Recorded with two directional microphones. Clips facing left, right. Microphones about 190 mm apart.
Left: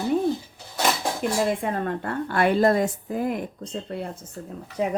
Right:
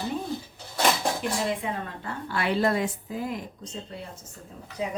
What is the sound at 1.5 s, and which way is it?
Speech, 50° left (ahead or behind).